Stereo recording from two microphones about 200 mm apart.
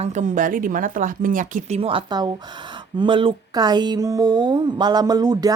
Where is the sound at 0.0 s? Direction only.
35° right (ahead or behind).